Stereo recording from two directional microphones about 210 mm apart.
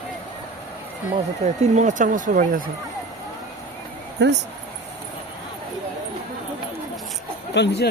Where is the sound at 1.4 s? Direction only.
30° right (ahead or behind).